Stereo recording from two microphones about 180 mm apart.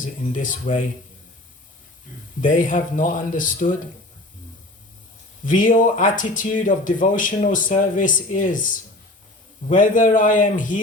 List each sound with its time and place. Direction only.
0.0 s speech: 45° left (ahead or behind)
2.4 s speech: 45° left (ahead or behind)
5.5 s speech: 45° left (ahead or behind)